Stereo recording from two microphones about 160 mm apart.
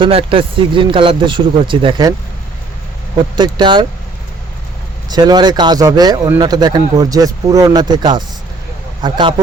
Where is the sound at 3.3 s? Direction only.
30° right (ahead or behind).